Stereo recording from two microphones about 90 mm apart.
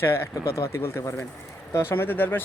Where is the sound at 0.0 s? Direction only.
30° left (ahead or behind).